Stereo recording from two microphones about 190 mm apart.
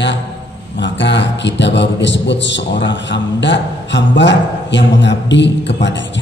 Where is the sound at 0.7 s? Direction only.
70° left (ahead or behind).